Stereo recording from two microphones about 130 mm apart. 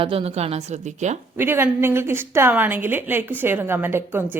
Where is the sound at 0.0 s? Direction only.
45° right (ahead or behind); by 1.2 s 65° right (ahead or behind).